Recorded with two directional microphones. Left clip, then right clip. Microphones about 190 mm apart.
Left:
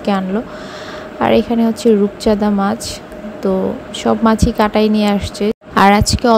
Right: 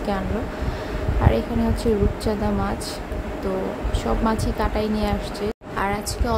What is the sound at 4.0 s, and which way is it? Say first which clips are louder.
A woman's voice: left 10 dB; 35° left (ahead or behind).